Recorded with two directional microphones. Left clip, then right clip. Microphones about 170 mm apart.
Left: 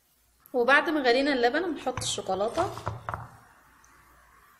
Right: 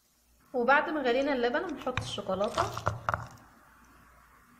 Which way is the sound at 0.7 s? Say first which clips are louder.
Left 3 dB; 30° left (ahead or behind).